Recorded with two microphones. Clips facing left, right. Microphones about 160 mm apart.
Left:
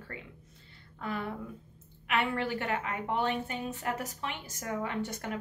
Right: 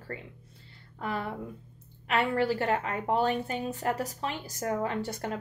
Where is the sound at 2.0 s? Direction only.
35° right (ahead or behind).